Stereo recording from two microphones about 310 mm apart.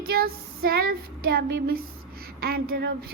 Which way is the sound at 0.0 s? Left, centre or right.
Right.